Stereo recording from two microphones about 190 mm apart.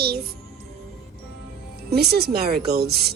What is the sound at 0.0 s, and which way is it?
Music, 55° right (ahead or behind).